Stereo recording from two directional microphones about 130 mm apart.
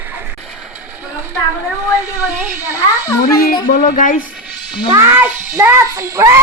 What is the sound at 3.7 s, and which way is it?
Speech, 90° left.